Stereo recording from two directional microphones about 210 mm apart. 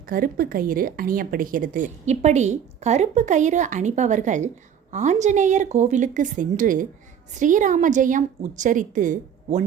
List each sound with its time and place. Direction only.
0.0 s a woman's voice: 40° right (ahead or behind)